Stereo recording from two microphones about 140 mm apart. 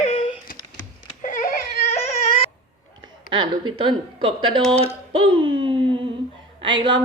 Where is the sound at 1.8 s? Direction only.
50° left (ahead or behind).